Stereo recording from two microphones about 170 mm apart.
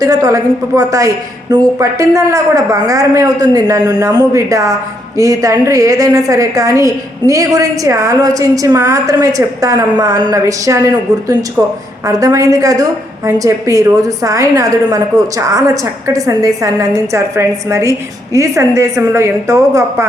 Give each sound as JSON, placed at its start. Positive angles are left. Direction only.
{"t": 0.0, "sound": "a woman's voice", "side_deg": -20}
{"t": 12.0, "sound": "a woman's voice", "side_deg": -20}